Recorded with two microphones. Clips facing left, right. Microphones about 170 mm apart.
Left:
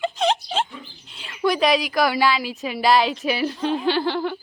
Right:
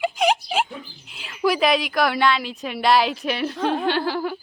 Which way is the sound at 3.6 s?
60° right (ahead or behind).